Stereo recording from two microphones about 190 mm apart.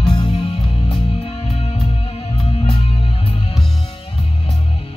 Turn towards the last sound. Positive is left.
turn(degrees=30)  # may be behind; listen again after turning